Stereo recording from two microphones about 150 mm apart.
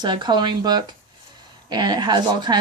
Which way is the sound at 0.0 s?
30° right (ahead or behind).